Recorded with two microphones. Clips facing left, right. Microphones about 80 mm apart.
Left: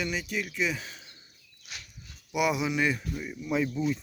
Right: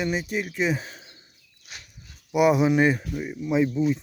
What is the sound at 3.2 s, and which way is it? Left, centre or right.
Speech, right.